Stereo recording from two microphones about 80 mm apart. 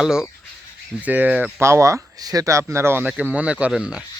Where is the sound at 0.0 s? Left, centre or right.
Centre.